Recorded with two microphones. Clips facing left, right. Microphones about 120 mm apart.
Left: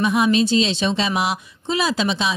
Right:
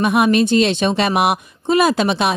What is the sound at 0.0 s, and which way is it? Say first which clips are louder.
Speech: right 3 dB; 60° right (ahead or behind).